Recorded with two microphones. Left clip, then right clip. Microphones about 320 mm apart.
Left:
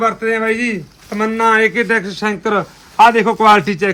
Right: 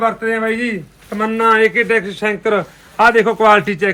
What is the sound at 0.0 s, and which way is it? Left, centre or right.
A man's voice, centre.